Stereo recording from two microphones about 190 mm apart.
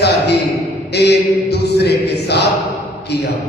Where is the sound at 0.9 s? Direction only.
60° left (ahead or behind).